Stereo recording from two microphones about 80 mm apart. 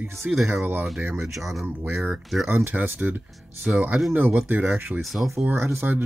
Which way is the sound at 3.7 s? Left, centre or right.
Centre.